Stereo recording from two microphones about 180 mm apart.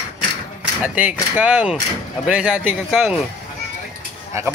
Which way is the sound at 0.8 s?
10° right (ahead or behind).